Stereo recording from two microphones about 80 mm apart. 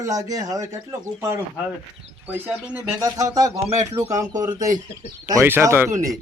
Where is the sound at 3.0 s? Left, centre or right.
Right.